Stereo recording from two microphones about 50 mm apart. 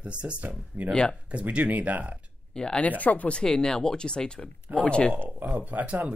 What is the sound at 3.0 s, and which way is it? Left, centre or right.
Speech, left.